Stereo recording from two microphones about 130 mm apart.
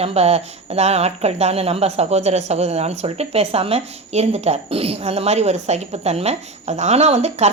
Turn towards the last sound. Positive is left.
turn(degrees=-55)  # may be behind; listen again after turning